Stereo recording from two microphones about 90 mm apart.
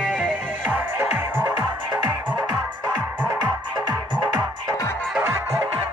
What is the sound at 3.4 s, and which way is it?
Music, 20° right (ahead or behind).